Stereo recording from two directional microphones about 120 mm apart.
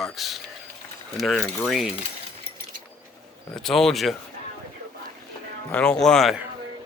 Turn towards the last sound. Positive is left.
turn(degrees=5)  # may be behind; listen again after turning